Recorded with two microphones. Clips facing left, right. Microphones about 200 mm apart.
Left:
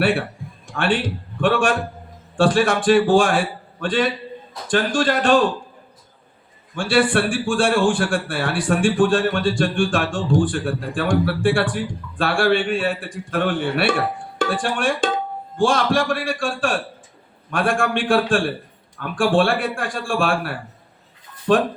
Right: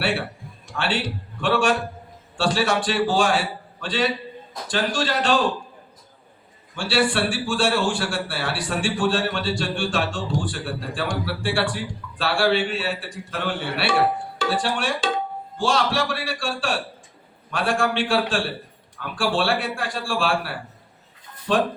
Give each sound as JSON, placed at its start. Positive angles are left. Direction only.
{"t": 0.0, "sound": "a man's voice", "side_deg": 50}
{"t": 6.7, "sound": "a man's voice", "side_deg": 50}